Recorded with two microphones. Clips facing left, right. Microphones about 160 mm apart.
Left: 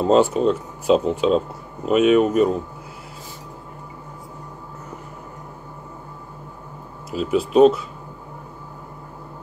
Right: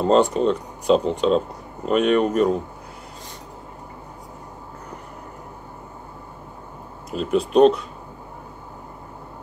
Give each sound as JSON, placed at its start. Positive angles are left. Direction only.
{"t": 0.0, "sound": "speech", "side_deg": 5}
{"t": 7.1, "sound": "speech", "side_deg": 5}